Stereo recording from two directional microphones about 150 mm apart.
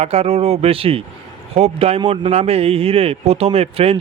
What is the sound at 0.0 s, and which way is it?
Speech, 45° right (ahead or behind).